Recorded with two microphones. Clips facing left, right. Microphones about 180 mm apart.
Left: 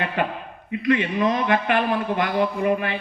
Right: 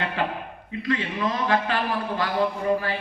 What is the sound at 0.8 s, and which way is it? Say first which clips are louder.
A man's voice: left 5 dB; 20° left (ahead or behind).